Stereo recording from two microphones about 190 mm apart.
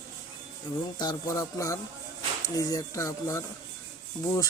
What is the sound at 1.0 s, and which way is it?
Speech, 20° left (ahead or behind).